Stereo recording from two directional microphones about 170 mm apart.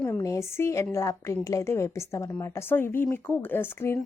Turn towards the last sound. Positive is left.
turn(degrees=15)  # may be behind; listen again after turning